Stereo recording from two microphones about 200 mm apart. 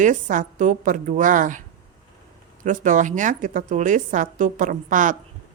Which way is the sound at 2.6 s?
40° right (ahead or behind).